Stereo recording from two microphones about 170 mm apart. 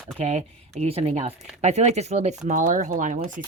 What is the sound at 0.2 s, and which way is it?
Speech, 40° right (ahead or behind).